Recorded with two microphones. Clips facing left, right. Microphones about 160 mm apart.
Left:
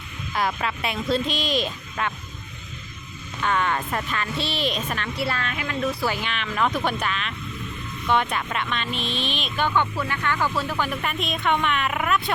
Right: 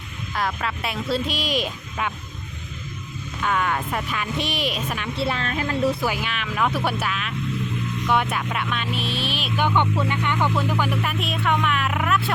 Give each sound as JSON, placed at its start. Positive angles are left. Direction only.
{"t": 0.3, "sound": "speech", "side_deg": 0}
{"t": 3.4, "sound": "speech", "side_deg": -5}
{"t": 5.1, "sound": "a woman's voice", "side_deg": -25}
{"t": 6.0, "sound": "speech", "side_deg": -10}